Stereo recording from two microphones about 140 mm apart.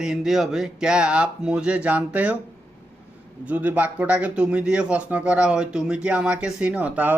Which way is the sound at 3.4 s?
10° right (ahead or behind).